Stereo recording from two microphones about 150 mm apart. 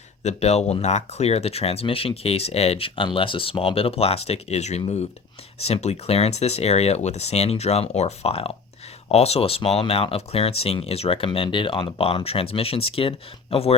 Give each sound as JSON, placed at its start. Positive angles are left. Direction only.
{"t": 0.2, "sound": "speech", "side_deg": 50}